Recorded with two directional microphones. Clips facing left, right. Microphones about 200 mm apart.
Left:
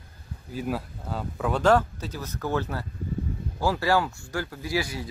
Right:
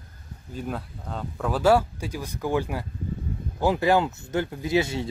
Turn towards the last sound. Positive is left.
turn(degrees=-25)  # may be behind; listen again after turning